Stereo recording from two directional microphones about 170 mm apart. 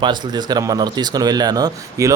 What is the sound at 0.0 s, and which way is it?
Speech, 25° right (ahead or behind).